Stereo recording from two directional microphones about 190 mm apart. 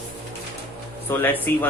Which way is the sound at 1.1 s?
10° left (ahead or behind).